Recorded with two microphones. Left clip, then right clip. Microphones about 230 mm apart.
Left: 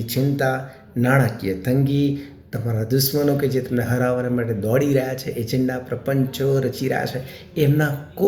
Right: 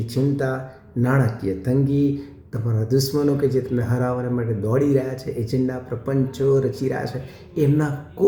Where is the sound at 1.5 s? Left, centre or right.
Centre.